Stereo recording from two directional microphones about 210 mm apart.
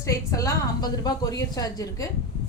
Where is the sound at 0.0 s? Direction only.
15° left (ahead or behind).